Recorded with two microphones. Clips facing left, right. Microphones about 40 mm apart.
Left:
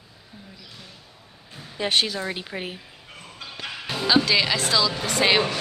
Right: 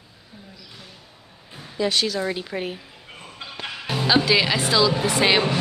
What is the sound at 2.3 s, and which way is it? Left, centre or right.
Speech, centre.